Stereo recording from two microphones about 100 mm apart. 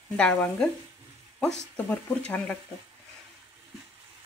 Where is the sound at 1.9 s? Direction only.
15° left (ahead or behind).